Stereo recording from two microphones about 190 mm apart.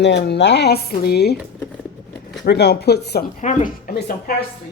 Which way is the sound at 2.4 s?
60° left (ahead or behind).